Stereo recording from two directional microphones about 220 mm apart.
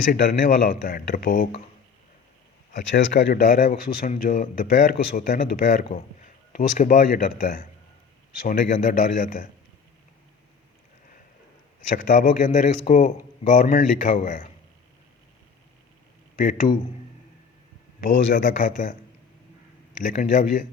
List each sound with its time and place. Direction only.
0.1 s speech: 40° left (ahead or behind)
2.9 s speech: 50° left (ahead or behind)
11.9 s speech: 40° left (ahead or behind)
16.3 s a man's voice: 40° left (ahead or behind)
18.3 s speech: 35° left (ahead or behind)
20.1 s speech: 35° left (ahead or behind)